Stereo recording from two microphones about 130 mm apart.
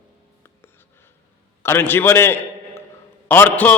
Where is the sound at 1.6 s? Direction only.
15° left (ahead or behind).